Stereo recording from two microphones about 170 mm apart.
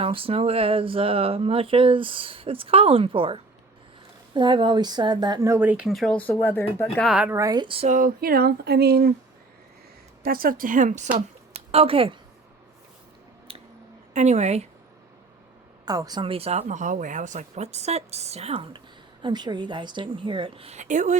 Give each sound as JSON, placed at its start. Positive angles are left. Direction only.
{"t": 0.0, "sound": "speech", "side_deg": -35}
{"t": 6.9, "sound": "speech", "side_deg": 0}
{"t": 7.9, "sound": "a sound", "side_deg": -50}
{"t": 10.2, "sound": "a woman's voice", "side_deg": -60}
{"t": 13.5, "sound": "a sound", "side_deg": -35}
{"t": 14.1, "sound": "speech", "side_deg": -45}
{"t": 15.9, "sound": "a woman's voice", "side_deg": -20}